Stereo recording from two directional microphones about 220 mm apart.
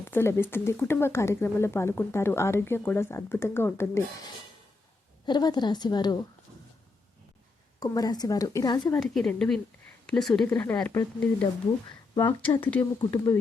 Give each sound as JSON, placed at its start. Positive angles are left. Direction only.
{"t": 0.0, "sound": "speech", "side_deg": 10}
{"t": 5.2, "sound": "a woman's voice", "side_deg": 20}
{"t": 7.8, "sound": "speech", "side_deg": 15}
{"t": 9.0, "sound": "a woman's voice", "side_deg": 0}
{"t": 12.1, "sound": "a woman's voice", "side_deg": 20}